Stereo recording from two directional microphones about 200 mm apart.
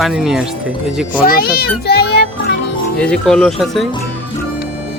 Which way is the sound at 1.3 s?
50° left (ahead or behind).